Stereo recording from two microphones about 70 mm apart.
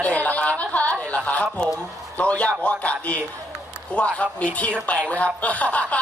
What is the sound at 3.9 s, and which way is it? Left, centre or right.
Speech, centre.